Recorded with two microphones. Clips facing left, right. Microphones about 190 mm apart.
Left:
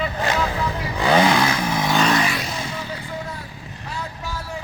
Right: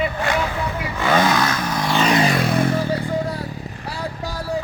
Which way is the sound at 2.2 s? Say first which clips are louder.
Right 8 dB; 55° right (ahead or behind).